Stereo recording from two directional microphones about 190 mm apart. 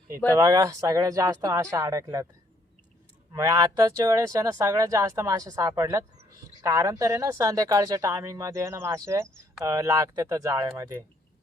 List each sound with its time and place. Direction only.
0.3 s speech: 15° right (ahead or behind)
3.3 s speech: 20° right (ahead or behind)